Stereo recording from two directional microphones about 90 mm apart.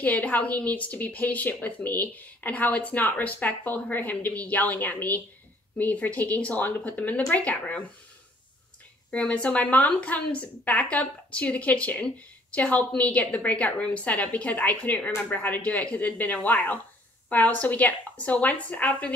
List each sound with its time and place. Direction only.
0.0 s a woman's voice: 15° left (ahead or behind)
9.1 s a woman's voice: 15° left (ahead or behind)